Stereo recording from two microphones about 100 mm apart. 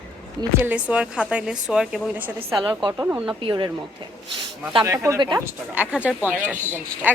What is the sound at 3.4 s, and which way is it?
Speech, 50° right (ahead or behind).